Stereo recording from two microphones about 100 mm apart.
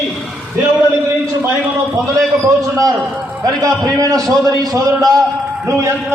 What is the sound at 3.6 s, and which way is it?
A man's voice, 35° right (ahead or behind).